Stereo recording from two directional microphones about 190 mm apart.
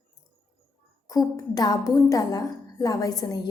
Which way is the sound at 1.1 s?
20° left (ahead or behind).